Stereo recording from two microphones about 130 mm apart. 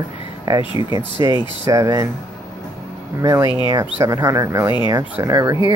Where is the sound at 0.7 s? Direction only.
30° right (ahead or behind).